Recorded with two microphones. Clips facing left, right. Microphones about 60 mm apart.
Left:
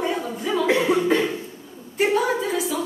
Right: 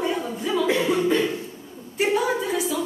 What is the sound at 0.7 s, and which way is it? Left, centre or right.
Cough, left.